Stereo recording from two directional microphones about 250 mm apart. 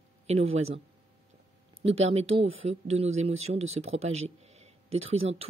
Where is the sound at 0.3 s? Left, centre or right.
Right.